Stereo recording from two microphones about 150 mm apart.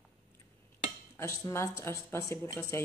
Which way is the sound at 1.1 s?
20° left (ahead or behind).